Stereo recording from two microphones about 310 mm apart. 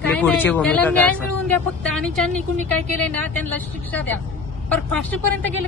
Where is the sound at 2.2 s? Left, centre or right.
Right.